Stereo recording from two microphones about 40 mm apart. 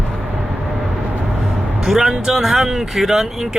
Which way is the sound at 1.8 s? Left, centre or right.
Centre.